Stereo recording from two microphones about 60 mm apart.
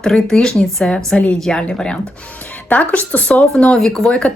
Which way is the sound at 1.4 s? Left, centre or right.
Centre.